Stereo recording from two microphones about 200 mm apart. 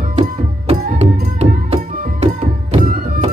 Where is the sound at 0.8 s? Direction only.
35° right (ahead or behind).